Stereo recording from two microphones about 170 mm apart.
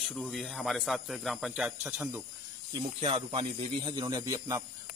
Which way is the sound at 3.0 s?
35° right (ahead or behind).